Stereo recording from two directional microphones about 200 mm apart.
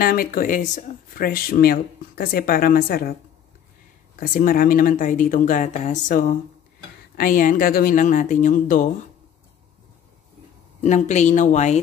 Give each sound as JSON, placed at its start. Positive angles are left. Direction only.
{"t": 0.0, "sound": "speech", "side_deg": 45}
{"t": 4.2, "sound": "speech", "side_deg": 45}
{"t": 10.8, "sound": "speech", "side_deg": 35}